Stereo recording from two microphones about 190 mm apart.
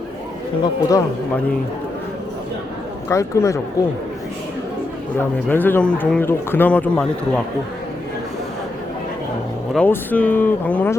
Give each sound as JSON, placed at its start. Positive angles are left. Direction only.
{"t": 0.6, "sound": "speech", "side_deg": 20}
{"t": 3.1, "sound": "speech", "side_deg": 15}
{"t": 5.1, "sound": "speech", "side_deg": 10}
{"t": 9.7, "sound": "speech", "side_deg": 10}